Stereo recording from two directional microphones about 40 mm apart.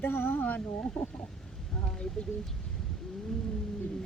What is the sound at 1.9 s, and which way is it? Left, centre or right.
Speech, left.